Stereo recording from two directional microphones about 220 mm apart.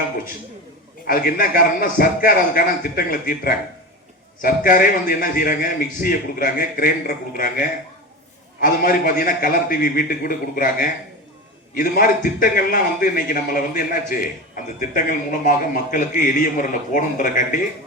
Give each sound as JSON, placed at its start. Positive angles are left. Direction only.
{"t": 1.0, "sound": "a man's voice", "side_deg": 40}